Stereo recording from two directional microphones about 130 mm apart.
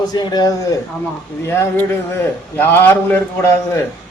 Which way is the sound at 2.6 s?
15° left (ahead or behind).